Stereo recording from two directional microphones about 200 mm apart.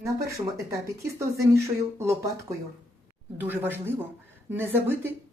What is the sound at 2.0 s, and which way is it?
Speech, 15° right (ahead or behind).